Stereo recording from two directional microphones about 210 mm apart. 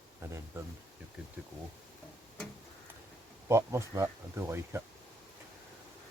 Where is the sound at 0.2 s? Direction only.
15° right (ahead or behind).